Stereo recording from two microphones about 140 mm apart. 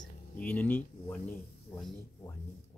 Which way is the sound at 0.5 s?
15° left (ahead or behind).